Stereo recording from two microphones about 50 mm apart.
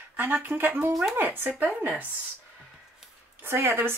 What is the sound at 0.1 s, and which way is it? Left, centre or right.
Speech, right.